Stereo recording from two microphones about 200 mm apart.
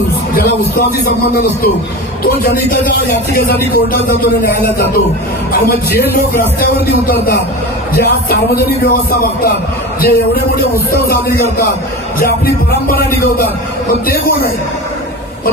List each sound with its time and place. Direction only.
0.3 s speech: 45° left (ahead or behind)
12.9 s speech: 50° left (ahead or behind)